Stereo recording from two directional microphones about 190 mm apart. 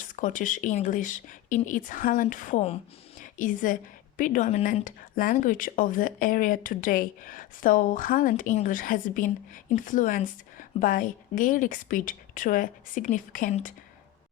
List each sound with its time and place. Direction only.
0.0 s speech: 40° left (ahead or behind)
3.2 s a sound: 45° left (ahead or behind)
4.2 s speech: 45° left (ahead or behind)